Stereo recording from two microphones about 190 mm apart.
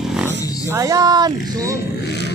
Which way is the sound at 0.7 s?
15° right (ahead or behind).